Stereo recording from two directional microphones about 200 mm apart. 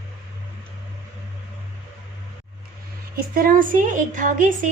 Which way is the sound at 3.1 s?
45° right (ahead or behind).